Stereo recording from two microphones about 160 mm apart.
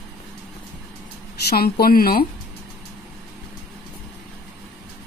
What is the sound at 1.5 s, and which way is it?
Speech, 70° left (ahead or behind).